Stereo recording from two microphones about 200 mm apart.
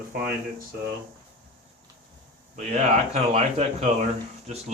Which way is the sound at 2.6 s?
35° right (ahead or behind).